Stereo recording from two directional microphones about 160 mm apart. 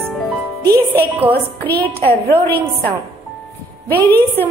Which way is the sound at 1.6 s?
10° left (ahead or behind).